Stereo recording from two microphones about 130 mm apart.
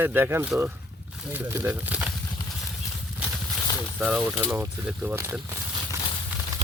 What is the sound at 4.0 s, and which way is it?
Speech, 10° right (ahead or behind).